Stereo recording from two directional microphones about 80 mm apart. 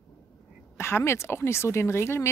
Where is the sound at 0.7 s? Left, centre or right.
Left.